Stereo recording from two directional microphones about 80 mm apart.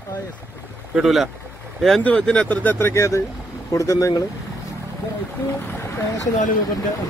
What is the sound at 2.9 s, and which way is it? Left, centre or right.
Speech, left.